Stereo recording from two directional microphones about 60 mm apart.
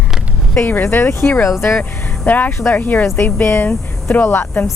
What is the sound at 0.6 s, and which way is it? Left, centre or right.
Speech, left.